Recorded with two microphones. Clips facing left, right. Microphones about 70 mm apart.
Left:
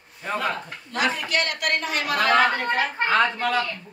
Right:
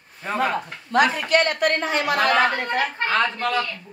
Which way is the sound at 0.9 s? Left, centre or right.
Right.